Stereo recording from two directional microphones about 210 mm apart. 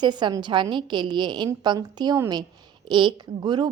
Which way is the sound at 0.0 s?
20° right (ahead or behind).